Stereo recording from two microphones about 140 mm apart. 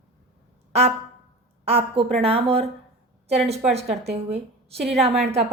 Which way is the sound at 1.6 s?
45° right (ahead or behind).